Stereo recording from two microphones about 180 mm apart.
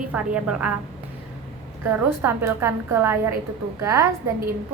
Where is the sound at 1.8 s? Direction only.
10° right (ahead or behind).